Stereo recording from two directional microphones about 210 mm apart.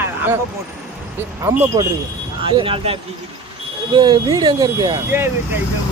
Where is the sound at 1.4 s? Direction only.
15° right (ahead or behind).